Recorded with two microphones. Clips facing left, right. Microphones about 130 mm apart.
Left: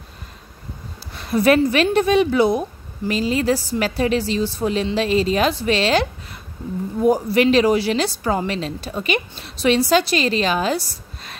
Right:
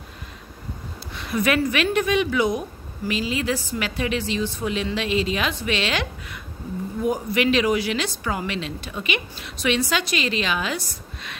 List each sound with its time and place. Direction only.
1.1 s speech: 35° left (ahead or behind)